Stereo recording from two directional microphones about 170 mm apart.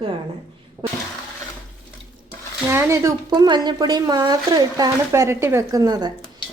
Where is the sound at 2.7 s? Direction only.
15° right (ahead or behind).